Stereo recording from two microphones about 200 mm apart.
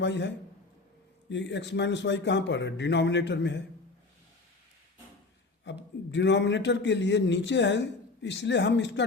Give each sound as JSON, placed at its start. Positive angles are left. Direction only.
{"t": 0.0, "sound": "a man's voice", "side_deg": 60}
{"t": 5.7, "sound": "a man's voice", "side_deg": 60}